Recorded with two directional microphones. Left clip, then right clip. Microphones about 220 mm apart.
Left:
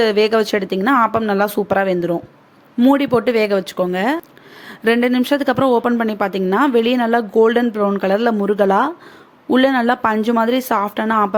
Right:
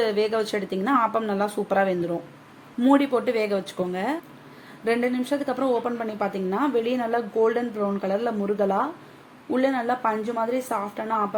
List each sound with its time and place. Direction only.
0.0 s a woman's voice: 30° left (ahead or behind)